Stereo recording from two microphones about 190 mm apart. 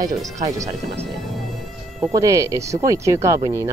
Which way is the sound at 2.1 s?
15° right (ahead or behind).